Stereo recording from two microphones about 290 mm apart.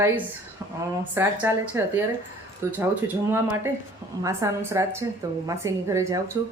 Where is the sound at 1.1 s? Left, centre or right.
Centre.